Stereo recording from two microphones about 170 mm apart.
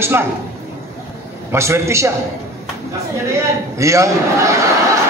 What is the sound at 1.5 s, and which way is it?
Speech, 15° right (ahead or behind).